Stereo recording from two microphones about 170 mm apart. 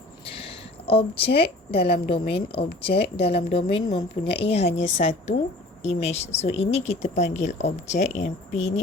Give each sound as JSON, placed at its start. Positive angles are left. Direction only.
{"t": 0.9, "sound": "speech", "side_deg": 35}